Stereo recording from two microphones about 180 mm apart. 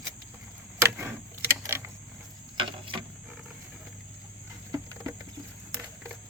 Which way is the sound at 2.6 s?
25° right (ahead or behind).